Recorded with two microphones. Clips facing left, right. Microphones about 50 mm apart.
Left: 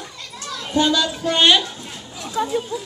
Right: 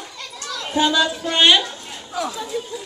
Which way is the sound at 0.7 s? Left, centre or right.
Centre.